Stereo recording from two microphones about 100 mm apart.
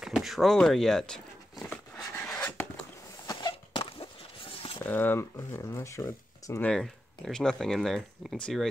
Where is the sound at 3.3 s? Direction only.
50° left (ahead or behind).